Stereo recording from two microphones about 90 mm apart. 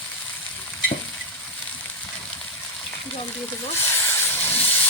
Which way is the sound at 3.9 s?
25° left (ahead or behind).